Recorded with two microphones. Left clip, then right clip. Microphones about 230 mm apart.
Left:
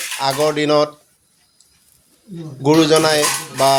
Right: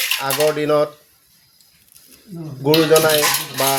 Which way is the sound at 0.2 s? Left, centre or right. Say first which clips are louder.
Left 6 dB; right.